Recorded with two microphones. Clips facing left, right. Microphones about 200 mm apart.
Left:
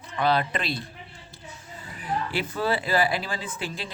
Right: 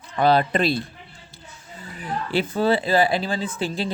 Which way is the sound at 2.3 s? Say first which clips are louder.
Right 8 dB; 25° right (ahead or behind).